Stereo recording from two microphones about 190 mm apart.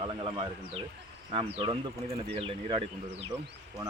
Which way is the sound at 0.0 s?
30° right (ahead or behind).